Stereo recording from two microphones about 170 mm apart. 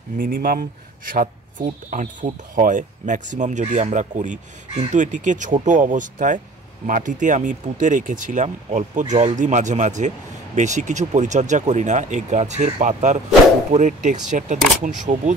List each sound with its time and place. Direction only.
0.2 s speech: 55° right (ahead or behind)